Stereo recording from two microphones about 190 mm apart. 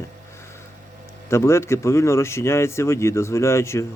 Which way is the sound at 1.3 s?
15° left (ahead or behind).